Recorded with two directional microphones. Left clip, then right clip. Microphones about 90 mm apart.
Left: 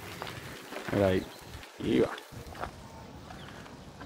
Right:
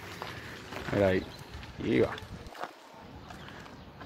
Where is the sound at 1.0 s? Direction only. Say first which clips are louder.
Right 1 dB; 20° left (ahead or behind).